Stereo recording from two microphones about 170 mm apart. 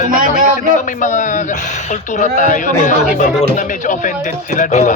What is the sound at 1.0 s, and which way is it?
A man's voice, 45° left (ahead or behind).